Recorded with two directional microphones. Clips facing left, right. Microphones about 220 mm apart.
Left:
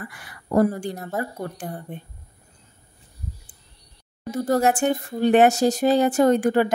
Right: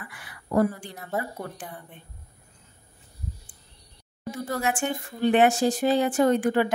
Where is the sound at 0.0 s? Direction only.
45° left (ahead or behind).